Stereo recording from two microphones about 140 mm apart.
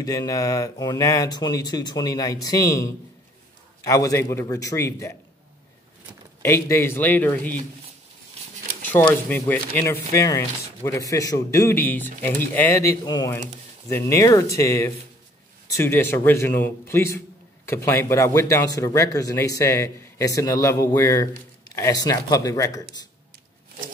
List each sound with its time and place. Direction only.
0.0 s speech: 25° left (ahead or behind)
6.4 s a man's voice: 20° left (ahead or behind)
9.1 s a man's voice: 15° left (ahead or behind)